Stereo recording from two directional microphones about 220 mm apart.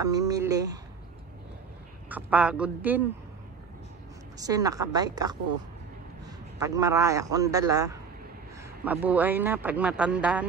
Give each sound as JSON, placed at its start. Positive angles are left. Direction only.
{"t": 0.0, "sound": "speech", "side_deg": -15}
{"t": 2.0, "sound": "speech", "side_deg": -5}
{"t": 4.4, "sound": "speech", "side_deg": -15}
{"t": 6.6, "sound": "speech", "side_deg": -15}